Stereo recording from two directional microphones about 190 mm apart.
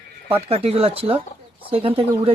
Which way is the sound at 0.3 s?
30° right (ahead or behind).